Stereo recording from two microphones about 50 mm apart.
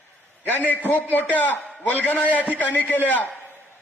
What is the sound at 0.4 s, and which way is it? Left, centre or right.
A man's voice, left.